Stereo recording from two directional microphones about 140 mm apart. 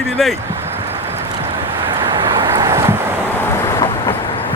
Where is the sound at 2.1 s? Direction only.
30° right (ahead or behind).